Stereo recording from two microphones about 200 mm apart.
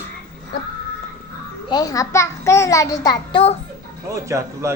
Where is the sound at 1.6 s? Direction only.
20° left (ahead or behind).